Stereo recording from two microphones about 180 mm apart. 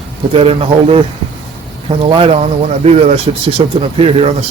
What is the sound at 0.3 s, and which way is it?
Speech, 30° right (ahead or behind).